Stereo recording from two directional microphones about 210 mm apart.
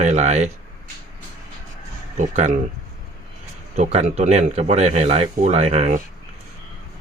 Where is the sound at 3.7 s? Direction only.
35° right (ahead or behind).